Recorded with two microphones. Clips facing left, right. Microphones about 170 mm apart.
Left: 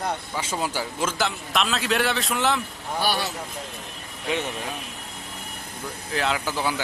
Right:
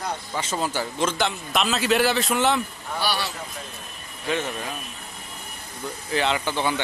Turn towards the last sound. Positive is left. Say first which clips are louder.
# right 2 dB
turn(degrees=5)  # may be behind; listen again after turning